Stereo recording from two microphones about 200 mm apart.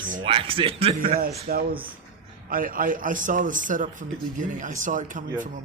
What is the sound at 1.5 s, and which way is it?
A man's voice, 45° right (ahead or behind).